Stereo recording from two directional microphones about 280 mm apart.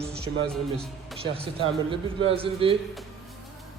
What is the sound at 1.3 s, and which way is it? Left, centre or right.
Speech, centre.